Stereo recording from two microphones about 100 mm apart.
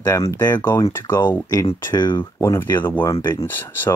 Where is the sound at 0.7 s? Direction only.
35° left (ahead or behind).